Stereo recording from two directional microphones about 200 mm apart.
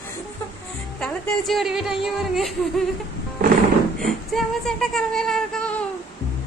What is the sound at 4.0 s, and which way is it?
Speech, centre (ahead or behind).